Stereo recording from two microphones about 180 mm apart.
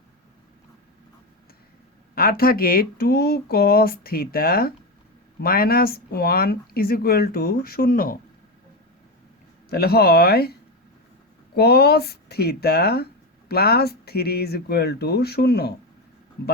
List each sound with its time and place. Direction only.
2.1 s speech: 55° left (ahead or behind)
9.6 s speech: 60° left (ahead or behind)
11.5 s speech: 65° left (ahead or behind)